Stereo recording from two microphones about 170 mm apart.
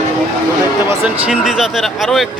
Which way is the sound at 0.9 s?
5° right (ahead or behind).